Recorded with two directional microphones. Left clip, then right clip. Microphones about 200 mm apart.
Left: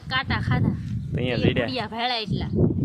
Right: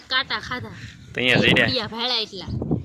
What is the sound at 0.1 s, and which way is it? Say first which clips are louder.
Speech: right 2 dB; 30° left (ahead or behind).